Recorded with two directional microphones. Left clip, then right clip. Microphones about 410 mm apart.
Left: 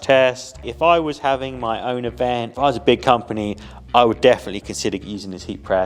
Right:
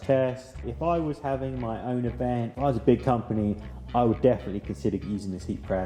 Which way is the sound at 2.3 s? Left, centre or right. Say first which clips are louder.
Left 9 dB; centre.